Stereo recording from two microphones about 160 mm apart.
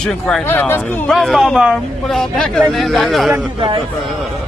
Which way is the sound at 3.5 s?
30° right (ahead or behind).